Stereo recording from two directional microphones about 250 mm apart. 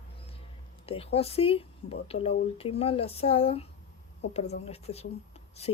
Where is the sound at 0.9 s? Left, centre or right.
Left.